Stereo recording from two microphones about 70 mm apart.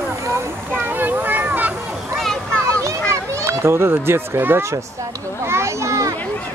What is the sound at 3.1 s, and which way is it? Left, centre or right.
A child's voice, right.